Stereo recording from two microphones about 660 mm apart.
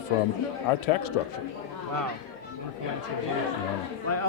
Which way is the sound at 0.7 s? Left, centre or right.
Left.